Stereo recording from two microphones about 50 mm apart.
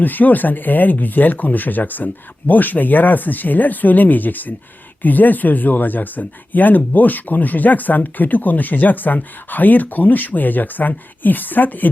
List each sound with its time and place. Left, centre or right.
0.0 s speech: left